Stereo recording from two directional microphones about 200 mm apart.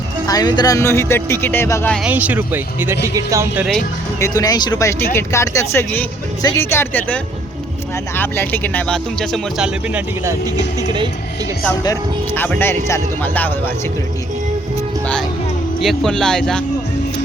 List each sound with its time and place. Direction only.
0.3 s speech: 20° left (ahead or behind)
2.0 s speech: 10° right (ahead or behind)
4.2 s speech: 20° left (ahead or behind); by 10.0 s centre (ahead or behind)
12.4 s speech: 10° left (ahead or behind)
15.8 s a man's voice: centre (ahead or behind)